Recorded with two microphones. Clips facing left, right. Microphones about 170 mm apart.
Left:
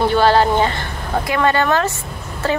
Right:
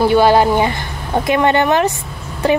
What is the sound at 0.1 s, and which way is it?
Speech, 15° right (ahead or behind).